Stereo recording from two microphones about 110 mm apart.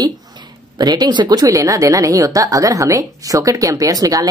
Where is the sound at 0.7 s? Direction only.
40° right (ahead or behind).